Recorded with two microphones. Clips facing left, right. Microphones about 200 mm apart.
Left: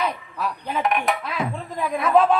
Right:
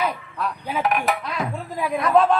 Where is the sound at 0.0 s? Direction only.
5° left (ahead or behind).